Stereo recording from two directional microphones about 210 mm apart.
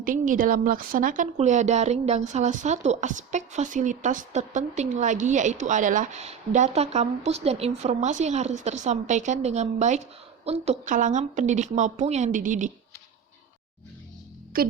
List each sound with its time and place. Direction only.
0.0 s a woman's voice: 40° right (ahead or behind)
14.5 s a woman's voice: 45° right (ahead or behind)